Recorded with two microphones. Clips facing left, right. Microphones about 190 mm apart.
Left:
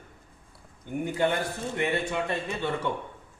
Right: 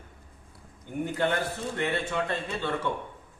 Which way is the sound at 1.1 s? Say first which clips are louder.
Left 1 dB; 15° left (ahead or behind).